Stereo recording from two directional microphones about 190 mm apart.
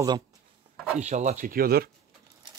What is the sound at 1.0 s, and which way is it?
Speech, 40° right (ahead or behind).